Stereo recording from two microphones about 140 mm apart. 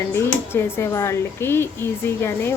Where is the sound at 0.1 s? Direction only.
20° left (ahead or behind).